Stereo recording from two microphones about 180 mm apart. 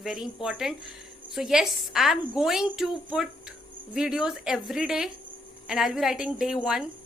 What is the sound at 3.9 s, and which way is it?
Speech, 5° right (ahead or behind).